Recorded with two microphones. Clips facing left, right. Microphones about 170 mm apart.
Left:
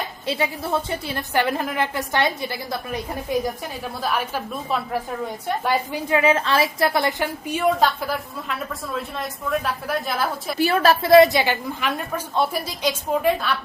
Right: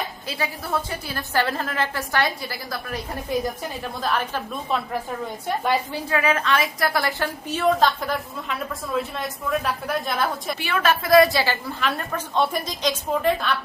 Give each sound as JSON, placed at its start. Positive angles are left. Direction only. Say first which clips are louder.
{"t": 0.3, "sound": "a woman's voice", "louder": "left 5 dB", "side_deg": 25}
{"t": 4.0, "sound": "a woman's voice", "louder": "even", "side_deg": 10}
{"t": 5.9, "sound": "a woman's voice", "louder": "left 4 dB", "side_deg": 20}
{"t": 10.6, "sound": "a woman's voice", "louder": "left 6 dB", "side_deg": 40}